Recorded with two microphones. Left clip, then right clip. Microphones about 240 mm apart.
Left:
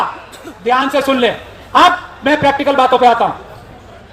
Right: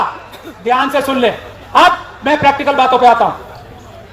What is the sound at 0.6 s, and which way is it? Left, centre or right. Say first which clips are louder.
Speech: even; left.